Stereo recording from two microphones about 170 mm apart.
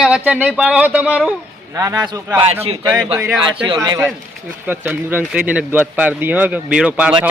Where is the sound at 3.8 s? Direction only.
20° right (ahead or behind).